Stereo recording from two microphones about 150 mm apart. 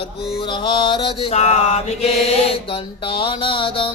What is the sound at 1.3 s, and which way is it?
Mantra, 45° left (ahead or behind).